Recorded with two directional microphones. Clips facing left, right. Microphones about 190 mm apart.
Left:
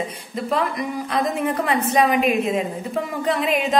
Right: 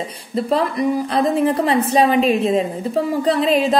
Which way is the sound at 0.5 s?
30° right (ahead or behind).